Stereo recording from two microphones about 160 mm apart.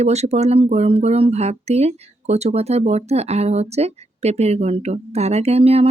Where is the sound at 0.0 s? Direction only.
45° right (ahead or behind).